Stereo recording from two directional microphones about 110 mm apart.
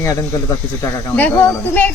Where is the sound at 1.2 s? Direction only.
15° left (ahead or behind).